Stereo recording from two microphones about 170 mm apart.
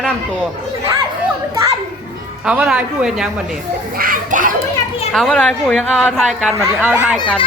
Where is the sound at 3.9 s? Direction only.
55° right (ahead or behind).